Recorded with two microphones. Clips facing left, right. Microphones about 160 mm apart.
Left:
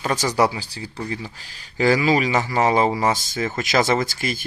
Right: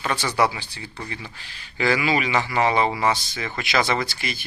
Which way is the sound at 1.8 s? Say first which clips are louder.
Left 4 dB; 40° left (ahead or behind).